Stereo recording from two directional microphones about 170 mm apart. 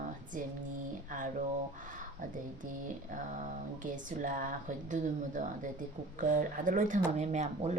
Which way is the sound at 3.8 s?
50° right (ahead or behind).